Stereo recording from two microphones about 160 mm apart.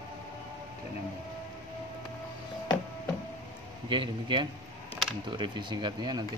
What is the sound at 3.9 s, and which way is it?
Speech, 30° right (ahead or behind).